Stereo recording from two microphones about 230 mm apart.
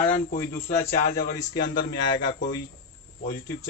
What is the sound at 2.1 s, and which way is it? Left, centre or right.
Speech, centre.